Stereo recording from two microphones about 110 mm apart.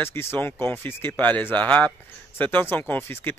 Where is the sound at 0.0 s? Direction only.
20° left (ahead or behind).